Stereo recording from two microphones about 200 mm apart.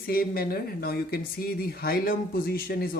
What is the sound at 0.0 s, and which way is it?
Speech, 50° left (ahead or behind).